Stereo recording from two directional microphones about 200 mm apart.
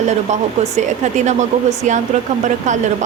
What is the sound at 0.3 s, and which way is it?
Speech, 35° right (ahead or behind).